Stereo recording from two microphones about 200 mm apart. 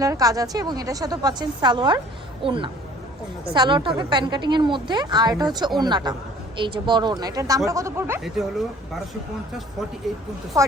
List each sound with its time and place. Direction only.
0.0 s a woman's voice: 15° right (ahead or behind)
8.2 s speech: centre (ahead or behind)
10.5 s speech: 15° right (ahead or behind)